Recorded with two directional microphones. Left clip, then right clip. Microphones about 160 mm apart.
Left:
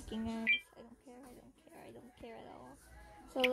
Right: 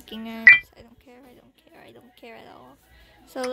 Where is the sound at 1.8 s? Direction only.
Centre (ahead or behind).